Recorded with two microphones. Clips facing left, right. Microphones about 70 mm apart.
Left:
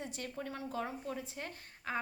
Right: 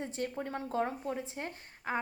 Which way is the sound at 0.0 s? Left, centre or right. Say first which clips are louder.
Right 5 dB; right.